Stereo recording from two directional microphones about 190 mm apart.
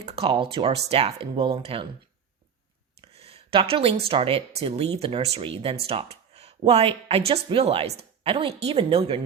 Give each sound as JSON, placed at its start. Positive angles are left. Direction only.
{"t": 0.0, "sound": "speech", "side_deg": -30}
{"t": 3.0, "sound": "speech", "side_deg": -35}